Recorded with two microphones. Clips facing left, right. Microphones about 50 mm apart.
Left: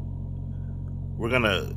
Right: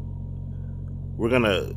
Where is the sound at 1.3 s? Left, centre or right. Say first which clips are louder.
Right 3 dB; left.